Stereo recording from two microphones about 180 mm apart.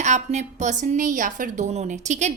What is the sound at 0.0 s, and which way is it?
A woman's voice, 40° right (ahead or behind).